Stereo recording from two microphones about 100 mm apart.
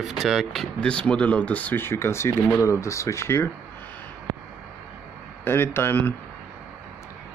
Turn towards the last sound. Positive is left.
turn(degrees=20)  # may be behind; listen again after turning